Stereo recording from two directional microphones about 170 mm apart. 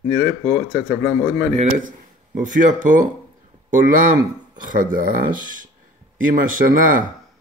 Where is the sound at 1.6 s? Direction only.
50° right (ahead or behind).